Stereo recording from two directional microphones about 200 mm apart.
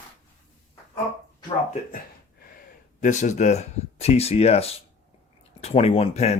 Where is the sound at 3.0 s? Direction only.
40° left (ahead or behind).